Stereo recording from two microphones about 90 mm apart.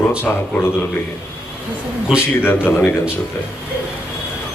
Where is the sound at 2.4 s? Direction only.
25° left (ahead or behind).